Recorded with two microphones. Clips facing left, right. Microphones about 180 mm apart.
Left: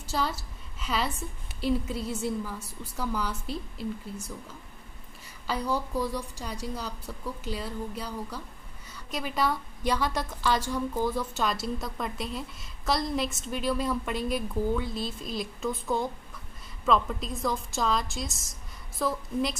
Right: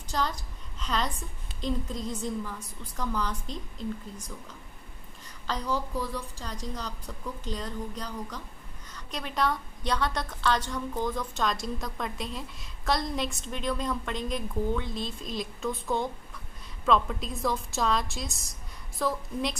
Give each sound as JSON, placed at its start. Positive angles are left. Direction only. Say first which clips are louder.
{"t": 0.0, "sound": "a woman's voice", "louder": "left 1 dB", "side_deg": 5}
{"t": 5.5, "sound": "a woman's voice", "louder": "left 2 dB", "side_deg": 10}